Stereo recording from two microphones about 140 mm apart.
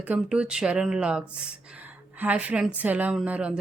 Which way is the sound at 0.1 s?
10° right (ahead or behind).